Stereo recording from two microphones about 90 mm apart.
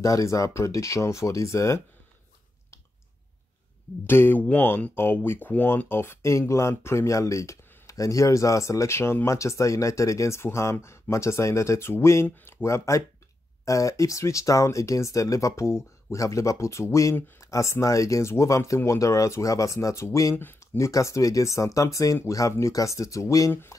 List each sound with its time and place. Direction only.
0.0 s speech: 35° left (ahead or behind)
4.0 s speech: 25° left (ahead or behind)